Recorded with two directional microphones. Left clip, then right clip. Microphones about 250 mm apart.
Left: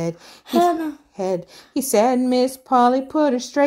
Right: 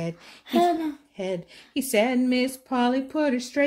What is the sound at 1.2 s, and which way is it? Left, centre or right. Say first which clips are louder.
Speech: left 9 dB; left.